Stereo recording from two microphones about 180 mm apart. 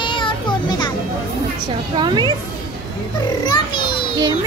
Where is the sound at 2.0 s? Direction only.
25° right (ahead or behind).